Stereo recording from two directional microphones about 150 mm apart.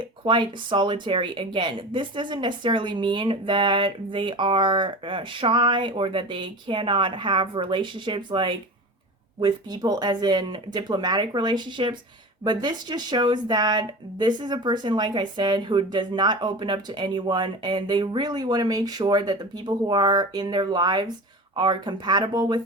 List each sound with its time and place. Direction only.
0.3 s speech: 30° right (ahead or behind)